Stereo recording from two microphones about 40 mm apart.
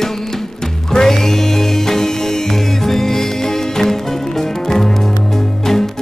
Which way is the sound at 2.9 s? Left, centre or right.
Centre.